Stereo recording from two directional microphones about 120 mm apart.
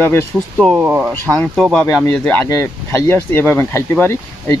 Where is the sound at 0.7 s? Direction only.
15° right (ahead or behind).